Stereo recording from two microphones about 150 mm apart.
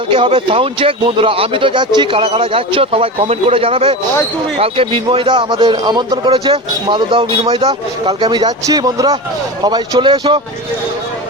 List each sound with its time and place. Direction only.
0.1 s a man's voice: 35° right (ahead or behind)